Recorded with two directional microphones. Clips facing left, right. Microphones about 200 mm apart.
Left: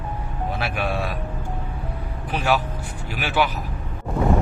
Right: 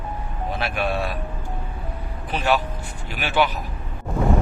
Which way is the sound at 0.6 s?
10° left (ahead or behind).